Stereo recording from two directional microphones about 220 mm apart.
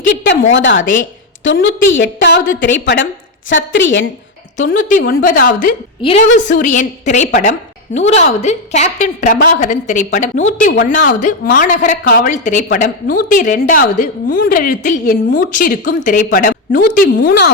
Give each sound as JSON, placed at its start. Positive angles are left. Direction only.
{"t": 0.5, "sound": "a woman's voice", "side_deg": 55}
{"t": 4.5, "sound": "a woman's voice", "side_deg": 35}
{"t": 6.0, "sound": "a woman's voice", "side_deg": 25}